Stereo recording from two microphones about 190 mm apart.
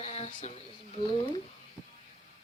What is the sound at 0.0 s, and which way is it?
Speech, 30° left (ahead or behind).